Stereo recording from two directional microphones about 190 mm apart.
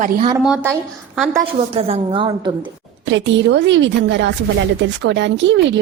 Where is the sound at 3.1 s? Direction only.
70° right (ahead or behind).